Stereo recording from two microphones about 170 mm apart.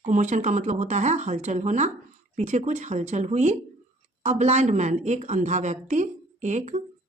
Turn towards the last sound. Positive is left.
turn(degrees=-45)  # may be behind; listen again after turning